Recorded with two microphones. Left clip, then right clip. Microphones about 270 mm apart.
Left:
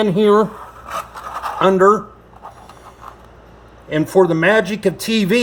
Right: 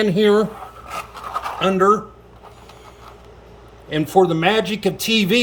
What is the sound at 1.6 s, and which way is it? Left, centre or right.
Speech, centre.